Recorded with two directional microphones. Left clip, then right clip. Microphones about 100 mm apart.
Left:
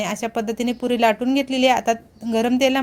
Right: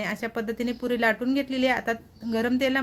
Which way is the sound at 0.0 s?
35° left (ahead or behind).